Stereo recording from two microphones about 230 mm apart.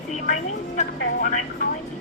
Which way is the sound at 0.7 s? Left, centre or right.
Left.